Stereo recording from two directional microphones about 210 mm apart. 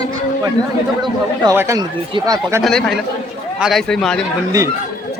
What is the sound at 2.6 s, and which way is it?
Speech, centre (ahead or behind).